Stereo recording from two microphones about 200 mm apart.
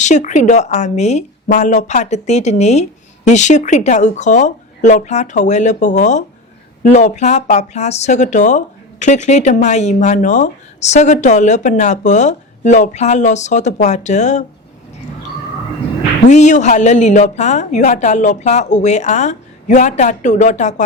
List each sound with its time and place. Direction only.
0.0 s speech: 35° left (ahead or behind)
16.3 s speech: 35° left (ahead or behind)